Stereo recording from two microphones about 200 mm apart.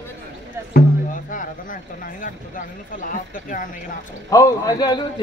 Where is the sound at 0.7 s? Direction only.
40° left (ahead or behind).